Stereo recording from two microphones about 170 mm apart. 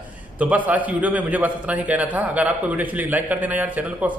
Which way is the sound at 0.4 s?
10° right (ahead or behind).